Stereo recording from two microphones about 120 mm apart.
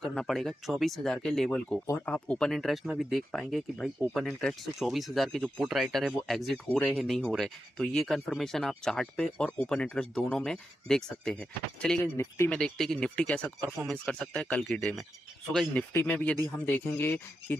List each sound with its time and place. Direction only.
0.0 s speech: 5° left (ahead or behind)
12.0 s speech: 20° left (ahead or behind)
12.4 s speech: 5° left (ahead or behind)